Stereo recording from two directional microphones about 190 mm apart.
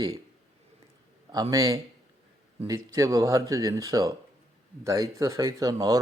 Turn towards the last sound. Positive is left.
turn(degrees=-20)  # may be behind; listen again after turning